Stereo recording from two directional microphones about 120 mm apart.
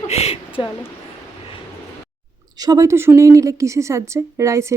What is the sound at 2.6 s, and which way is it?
A woman's voice, 30° right (ahead or behind).